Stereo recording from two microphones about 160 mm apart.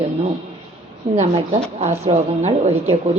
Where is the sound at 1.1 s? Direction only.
45° right (ahead or behind).